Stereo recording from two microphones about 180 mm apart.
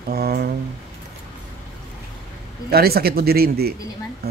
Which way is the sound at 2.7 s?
60° right (ahead or behind).